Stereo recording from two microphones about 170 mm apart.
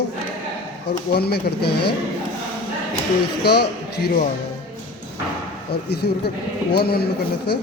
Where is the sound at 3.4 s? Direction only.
70° left (ahead or behind).